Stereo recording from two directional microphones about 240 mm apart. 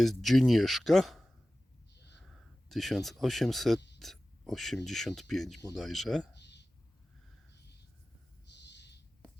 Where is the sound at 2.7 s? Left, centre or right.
Centre.